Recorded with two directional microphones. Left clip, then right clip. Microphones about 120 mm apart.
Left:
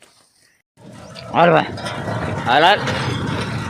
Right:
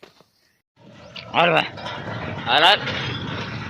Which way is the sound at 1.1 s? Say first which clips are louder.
Left 4 dB; 20° left (ahead or behind).